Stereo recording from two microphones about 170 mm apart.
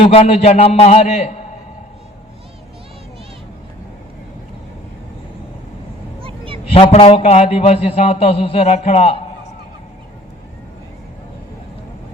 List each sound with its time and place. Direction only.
0.0 s a man's voice: 35° left (ahead or behind)
6.2 s a sound: 30° right (ahead or behind)
6.7 s a man's voice: 35° left (ahead or behind)